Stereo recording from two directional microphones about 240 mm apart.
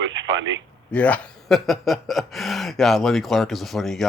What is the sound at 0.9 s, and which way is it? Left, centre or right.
Speech, centre.